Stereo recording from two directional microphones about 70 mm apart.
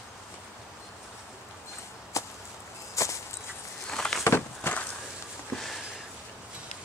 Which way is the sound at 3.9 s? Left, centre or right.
Centre.